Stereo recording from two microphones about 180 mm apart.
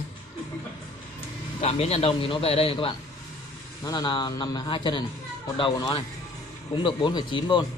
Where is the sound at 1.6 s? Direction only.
35° left (ahead or behind).